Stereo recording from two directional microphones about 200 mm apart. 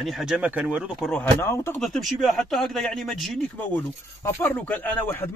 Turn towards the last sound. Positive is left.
turn(degrees=10)  # may be behind; listen again after turning